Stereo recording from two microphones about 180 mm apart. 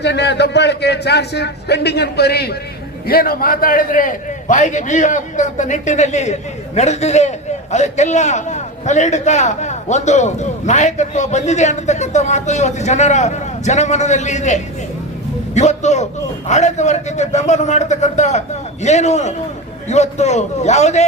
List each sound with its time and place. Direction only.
0.0 s a man's voice: 70° left (ahead or behind); by 21.0 s 40° left (ahead or behind)